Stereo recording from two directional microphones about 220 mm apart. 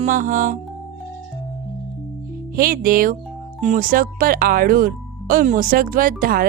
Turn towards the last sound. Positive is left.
turn(degrees=-40)  # may be behind; listen again after turning